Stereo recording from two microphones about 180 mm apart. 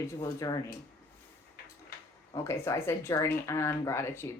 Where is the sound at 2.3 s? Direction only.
15° left (ahead or behind).